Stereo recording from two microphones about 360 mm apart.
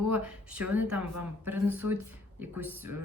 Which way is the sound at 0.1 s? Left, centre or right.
Centre.